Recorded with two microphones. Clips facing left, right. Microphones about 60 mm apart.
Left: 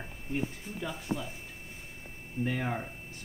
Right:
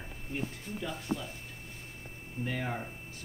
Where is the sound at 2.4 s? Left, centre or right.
Centre.